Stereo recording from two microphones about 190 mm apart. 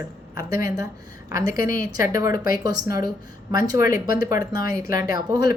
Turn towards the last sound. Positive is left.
turn(degrees=-20)  # may be behind; listen again after turning